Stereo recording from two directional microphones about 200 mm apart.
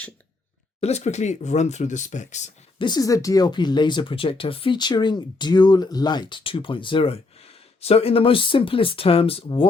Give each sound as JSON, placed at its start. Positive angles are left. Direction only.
{"t": 0.8, "sound": "speech", "side_deg": 35}
{"t": 2.8, "sound": "speech", "side_deg": 20}